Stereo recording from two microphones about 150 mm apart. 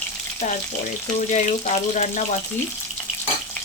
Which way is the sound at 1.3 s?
50° left (ahead or behind).